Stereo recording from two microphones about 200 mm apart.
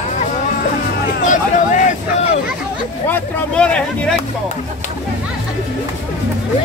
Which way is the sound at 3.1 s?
5° left (ahead or behind).